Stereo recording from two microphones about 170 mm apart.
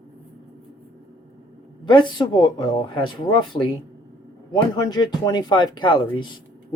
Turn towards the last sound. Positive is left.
turn(degrees=30)  # may be behind; listen again after turning